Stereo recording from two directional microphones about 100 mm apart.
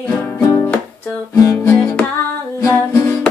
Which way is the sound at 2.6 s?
30° left (ahead or behind).